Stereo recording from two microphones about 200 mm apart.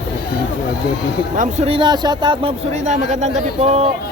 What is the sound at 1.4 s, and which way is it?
Speech, 35° right (ahead or behind).